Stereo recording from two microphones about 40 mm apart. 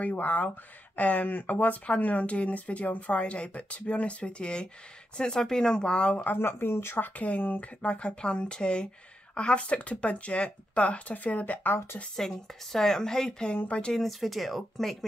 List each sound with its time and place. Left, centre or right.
0.0 s speech: left
6.3 s speech: left
7.8 s speech: left
12.2 s a woman's voice: centre; by 13.9 s left
13.9 s speech: centre